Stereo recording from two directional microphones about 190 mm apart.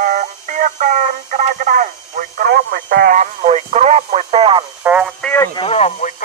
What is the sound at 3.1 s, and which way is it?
Speech, 40° right (ahead or behind).